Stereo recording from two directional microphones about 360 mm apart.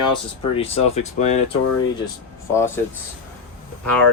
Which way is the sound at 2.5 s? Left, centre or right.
Centre.